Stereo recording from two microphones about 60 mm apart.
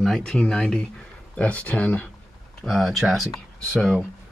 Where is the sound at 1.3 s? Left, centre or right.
Left.